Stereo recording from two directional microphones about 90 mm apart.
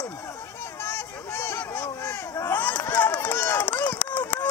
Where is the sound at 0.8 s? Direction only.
25° left (ahead or behind).